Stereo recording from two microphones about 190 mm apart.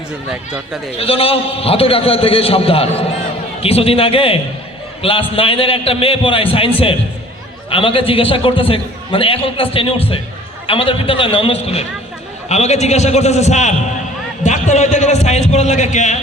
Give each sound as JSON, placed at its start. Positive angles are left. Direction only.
{"t": 0.3, "sound": "speech", "side_deg": -5}
{"t": 0.9, "sound": "a man's voice", "side_deg": 30}